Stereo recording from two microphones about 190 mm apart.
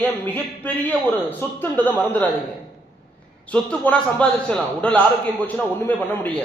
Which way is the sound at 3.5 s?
5° left (ahead or behind).